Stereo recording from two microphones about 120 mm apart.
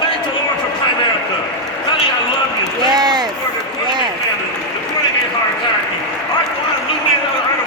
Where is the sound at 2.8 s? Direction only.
35° right (ahead or behind).